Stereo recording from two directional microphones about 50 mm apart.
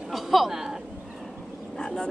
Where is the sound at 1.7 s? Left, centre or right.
Centre.